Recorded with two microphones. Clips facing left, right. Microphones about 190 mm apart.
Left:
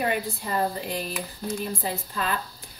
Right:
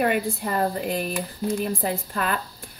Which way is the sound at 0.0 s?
55° right (ahead or behind).